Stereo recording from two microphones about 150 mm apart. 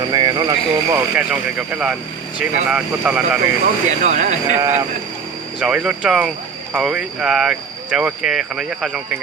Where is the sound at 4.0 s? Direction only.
50° right (ahead or behind).